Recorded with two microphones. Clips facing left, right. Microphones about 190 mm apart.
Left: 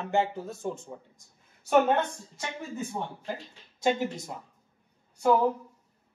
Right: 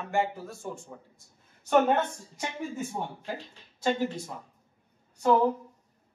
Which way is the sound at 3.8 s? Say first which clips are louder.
Left 1 dB; 20° left (ahead or behind).